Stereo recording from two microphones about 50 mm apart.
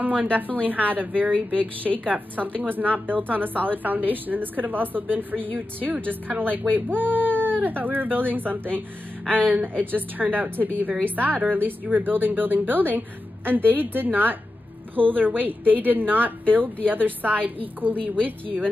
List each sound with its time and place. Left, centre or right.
0.0 s a woman's voice: right